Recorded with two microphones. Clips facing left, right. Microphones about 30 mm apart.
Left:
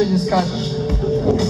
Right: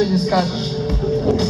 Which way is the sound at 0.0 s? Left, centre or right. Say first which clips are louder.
Even; right.